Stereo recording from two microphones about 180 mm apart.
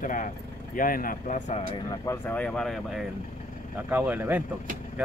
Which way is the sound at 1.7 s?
20° left (ahead or behind).